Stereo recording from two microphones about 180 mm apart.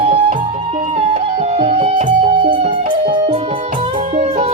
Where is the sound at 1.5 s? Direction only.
35° right (ahead or behind).